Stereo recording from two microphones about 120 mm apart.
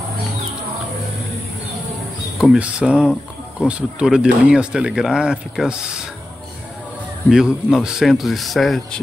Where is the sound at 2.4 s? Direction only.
5° right (ahead or behind).